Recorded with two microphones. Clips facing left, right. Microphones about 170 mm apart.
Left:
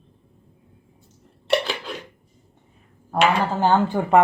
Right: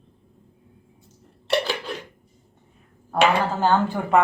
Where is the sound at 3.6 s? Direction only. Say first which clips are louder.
Left 4 dB; 15° left (ahead or behind).